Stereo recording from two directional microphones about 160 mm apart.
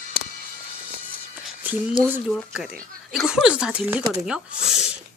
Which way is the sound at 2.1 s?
10° right (ahead or behind).